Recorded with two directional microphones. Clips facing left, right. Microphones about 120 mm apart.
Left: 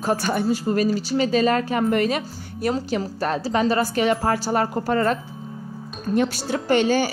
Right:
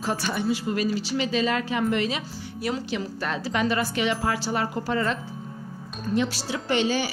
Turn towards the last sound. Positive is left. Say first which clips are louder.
# left 5 dB
turn(degrees=50)  # may be behind; listen again after turning